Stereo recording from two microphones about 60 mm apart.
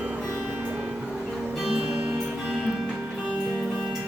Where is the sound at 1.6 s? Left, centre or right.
Centre.